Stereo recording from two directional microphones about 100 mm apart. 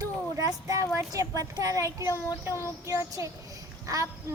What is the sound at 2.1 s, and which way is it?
Speech, 30° left (ahead or behind).